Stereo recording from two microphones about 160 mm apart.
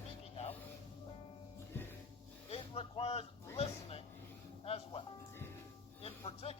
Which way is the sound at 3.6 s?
40° left (ahead or behind).